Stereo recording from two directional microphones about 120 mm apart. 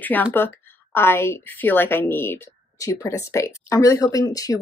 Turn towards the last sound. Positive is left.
turn(degrees=30)  # may be behind; listen again after turning